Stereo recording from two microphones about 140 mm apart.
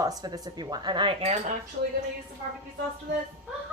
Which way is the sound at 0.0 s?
25° right (ahead or behind).